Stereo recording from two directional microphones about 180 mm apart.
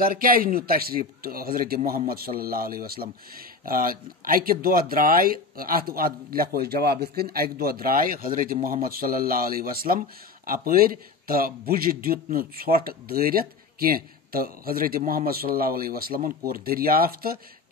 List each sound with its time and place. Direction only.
0.0 s speech: 55° right (ahead or behind)